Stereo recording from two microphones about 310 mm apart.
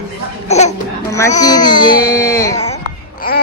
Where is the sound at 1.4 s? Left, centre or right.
Centre.